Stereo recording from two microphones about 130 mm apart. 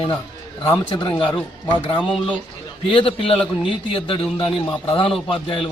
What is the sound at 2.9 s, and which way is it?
A man's voice, 45° left (ahead or behind).